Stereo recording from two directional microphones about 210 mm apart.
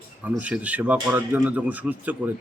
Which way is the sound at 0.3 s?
5° right (ahead or behind).